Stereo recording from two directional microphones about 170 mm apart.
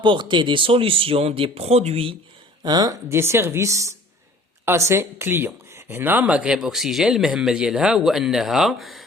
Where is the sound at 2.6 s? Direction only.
25° right (ahead or behind).